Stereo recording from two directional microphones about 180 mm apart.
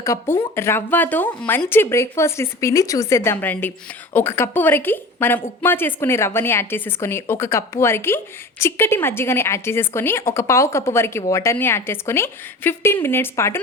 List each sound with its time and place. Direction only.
0.0 s a woman's voice: 15° left (ahead or behind)